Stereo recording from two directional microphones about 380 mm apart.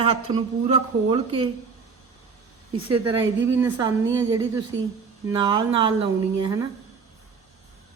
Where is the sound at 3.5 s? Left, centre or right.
Centre.